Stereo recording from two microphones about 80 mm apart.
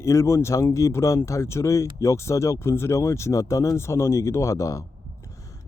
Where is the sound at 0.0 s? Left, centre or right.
Left.